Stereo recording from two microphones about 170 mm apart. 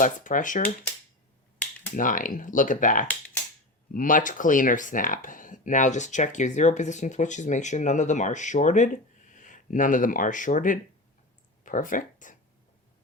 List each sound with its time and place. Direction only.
0.0 s speech: 50° left (ahead or behind)
2.0 s speech: 50° left (ahead or behind)